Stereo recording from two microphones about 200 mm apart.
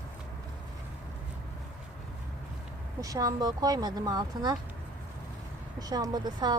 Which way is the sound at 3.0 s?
15° right (ahead or behind).